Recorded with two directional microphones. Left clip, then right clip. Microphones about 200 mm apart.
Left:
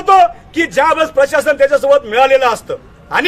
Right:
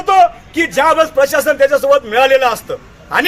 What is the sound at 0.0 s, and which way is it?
A man's voice, 25° left (ahead or behind).